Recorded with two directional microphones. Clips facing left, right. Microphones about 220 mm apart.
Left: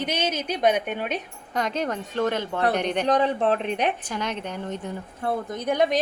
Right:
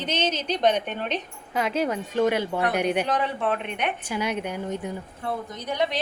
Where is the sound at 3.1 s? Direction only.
35° left (ahead or behind).